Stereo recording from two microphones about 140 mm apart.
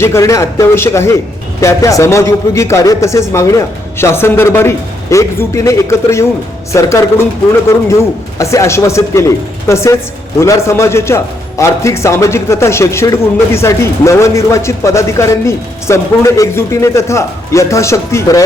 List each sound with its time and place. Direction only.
0.0 s a man's voice: 20° left (ahead or behind)